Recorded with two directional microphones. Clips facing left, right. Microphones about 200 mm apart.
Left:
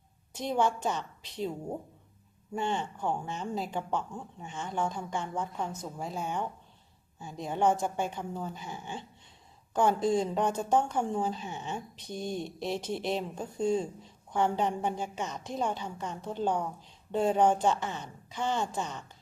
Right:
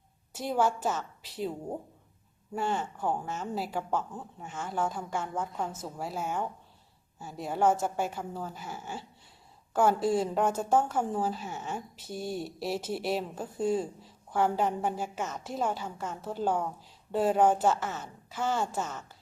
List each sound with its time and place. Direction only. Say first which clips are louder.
0.3 s a woman's voice: right 1 dB; 5° right (ahead or behind)